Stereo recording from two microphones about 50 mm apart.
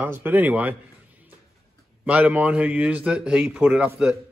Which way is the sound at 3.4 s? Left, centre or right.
Right.